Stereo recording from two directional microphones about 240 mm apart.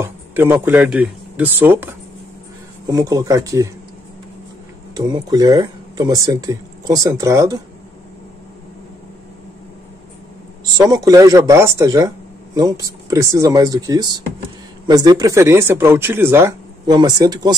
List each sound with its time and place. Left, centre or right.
0.0 s speech: centre
4.9 s speech: centre
10.6 s speech: centre